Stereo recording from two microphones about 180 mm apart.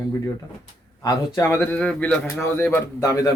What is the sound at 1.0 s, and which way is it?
A man's voice, 15° left (ahead or behind).